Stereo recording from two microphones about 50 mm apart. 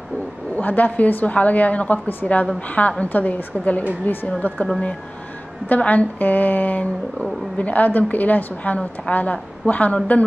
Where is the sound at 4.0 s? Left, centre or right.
Left.